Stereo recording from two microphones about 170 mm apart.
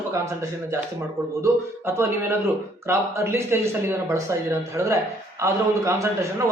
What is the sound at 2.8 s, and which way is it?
Speech, 15° right (ahead or behind).